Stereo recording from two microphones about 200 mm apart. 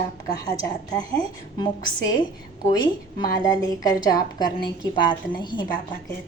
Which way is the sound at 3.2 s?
20° left (ahead or behind).